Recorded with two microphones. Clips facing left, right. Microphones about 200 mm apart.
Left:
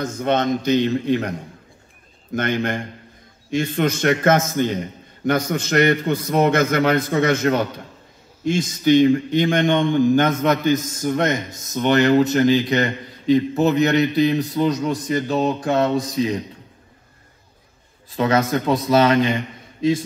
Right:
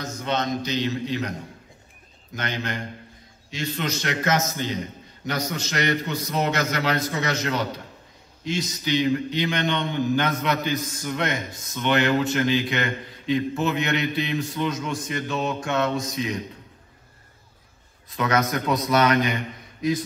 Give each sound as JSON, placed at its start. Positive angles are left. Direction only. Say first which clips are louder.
{"t": 0.0, "sound": "a man's voice", "louder": "left 7 dB", "side_deg": 55}
{"t": 2.3, "sound": "a man's voice", "louder": "left 8 dB", "side_deg": 55}
{"t": 18.1, "sound": "speech", "louder": "left 5 dB", "side_deg": 30}